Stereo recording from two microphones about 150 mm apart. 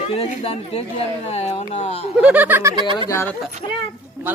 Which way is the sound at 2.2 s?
10° right (ahead or behind).